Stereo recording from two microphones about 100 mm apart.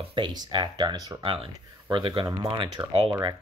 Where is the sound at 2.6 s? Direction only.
55° right (ahead or behind).